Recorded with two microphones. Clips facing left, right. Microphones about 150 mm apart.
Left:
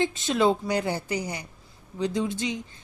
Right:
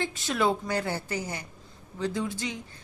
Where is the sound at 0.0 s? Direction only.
20° left (ahead or behind).